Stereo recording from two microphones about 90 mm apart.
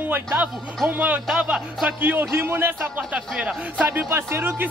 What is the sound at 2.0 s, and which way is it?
Speech, 25° right (ahead or behind).